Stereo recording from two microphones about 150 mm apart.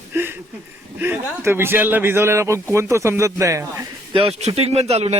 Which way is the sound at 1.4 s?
15° right (ahead or behind).